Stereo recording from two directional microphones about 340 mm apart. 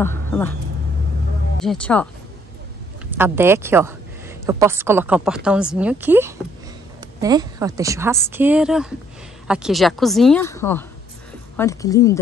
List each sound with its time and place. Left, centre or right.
0.0 s speech: centre
1.6 s a woman's voice: centre
3.2 s a woman's voice: centre